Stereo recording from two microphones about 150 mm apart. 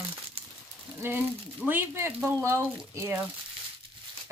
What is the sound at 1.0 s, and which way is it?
Speech, 15° right (ahead or behind).